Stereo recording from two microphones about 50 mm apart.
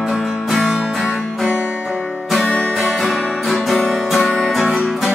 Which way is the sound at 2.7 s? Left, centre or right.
Centre.